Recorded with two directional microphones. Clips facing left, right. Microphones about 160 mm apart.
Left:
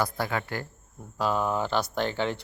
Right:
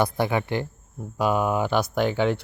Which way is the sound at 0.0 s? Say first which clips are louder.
Right 6 dB; 20° right (ahead or behind).